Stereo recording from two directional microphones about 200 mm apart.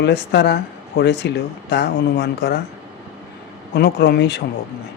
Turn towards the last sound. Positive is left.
turn(degrees=55)  # may be behind; listen again after turning